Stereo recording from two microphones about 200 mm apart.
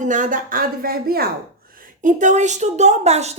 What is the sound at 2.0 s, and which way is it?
Speech, 40° right (ahead or behind).